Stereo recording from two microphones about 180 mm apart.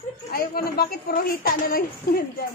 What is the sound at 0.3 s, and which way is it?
A woman's voice, 55° left (ahead or behind).